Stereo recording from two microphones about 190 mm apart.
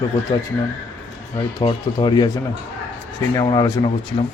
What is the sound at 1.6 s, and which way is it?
Speech, 25° left (ahead or behind).